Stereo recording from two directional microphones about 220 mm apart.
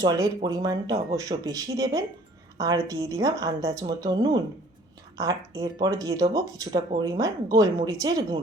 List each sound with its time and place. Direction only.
0.0 s speech: 15° right (ahead or behind)